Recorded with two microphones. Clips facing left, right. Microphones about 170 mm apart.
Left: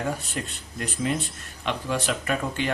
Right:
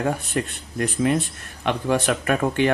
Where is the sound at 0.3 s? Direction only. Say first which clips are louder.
Right 8 dB; 60° right (ahead or behind).